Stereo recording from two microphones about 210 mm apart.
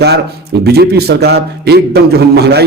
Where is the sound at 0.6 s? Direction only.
50° right (ahead or behind).